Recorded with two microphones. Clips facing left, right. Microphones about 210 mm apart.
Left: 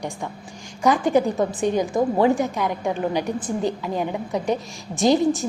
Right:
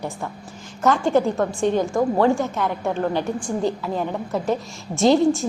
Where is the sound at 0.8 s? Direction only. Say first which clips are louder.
Even; 15° left (ahead or behind).